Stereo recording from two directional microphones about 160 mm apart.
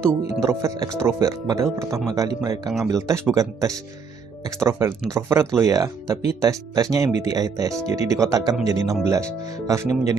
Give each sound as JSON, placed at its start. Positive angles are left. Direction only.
{"t": 0.4, "sound": "speech", "side_deg": -20}